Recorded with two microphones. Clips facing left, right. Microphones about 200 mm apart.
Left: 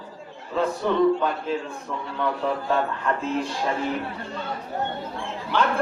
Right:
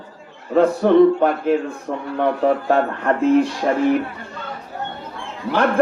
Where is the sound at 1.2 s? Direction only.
60° right (ahead or behind).